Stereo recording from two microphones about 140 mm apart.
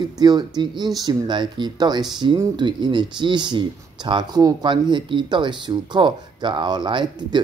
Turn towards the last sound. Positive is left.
turn(degrees=-30)  # may be behind; listen again after turning